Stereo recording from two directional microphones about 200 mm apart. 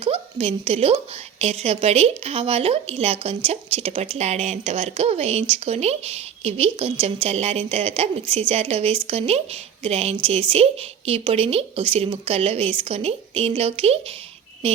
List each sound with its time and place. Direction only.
0.0 s a woman's voice: 30° right (ahead or behind)